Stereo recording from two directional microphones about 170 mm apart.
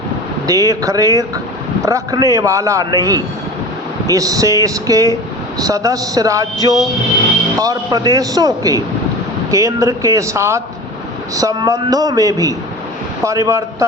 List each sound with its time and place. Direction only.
0.4 s a man's voice: 20° right (ahead or behind)